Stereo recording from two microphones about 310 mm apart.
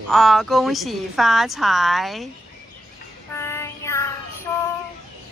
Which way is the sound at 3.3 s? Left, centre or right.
Centre.